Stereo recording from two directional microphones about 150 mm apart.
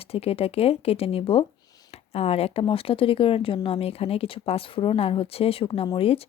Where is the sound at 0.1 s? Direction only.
40° left (ahead or behind).